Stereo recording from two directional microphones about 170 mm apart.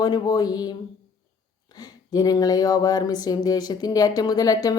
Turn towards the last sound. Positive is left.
turn(degrees=20)  # may be behind; listen again after turning